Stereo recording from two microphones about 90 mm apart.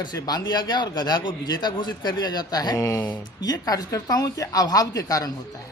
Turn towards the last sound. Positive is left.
turn(degrees=40)  # may be behind; listen again after turning